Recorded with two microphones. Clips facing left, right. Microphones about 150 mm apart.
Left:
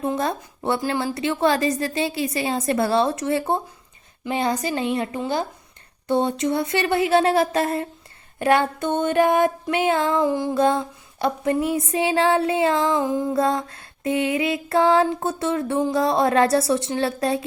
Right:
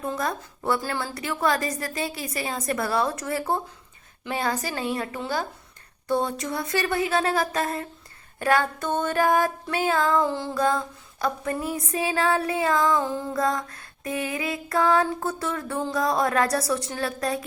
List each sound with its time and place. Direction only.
0.0 s a woman's voice: 25° left (ahead or behind)
10.2 s music: 15° left (ahead or behind)
10.5 s a woman's voice: 25° left (ahead or behind)
13.0 s music: 15° left (ahead or behind)
13.3 s a woman's voice: 25° left (ahead or behind)